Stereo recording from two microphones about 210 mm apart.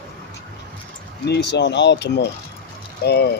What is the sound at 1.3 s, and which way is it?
Speech, 55° left (ahead or behind).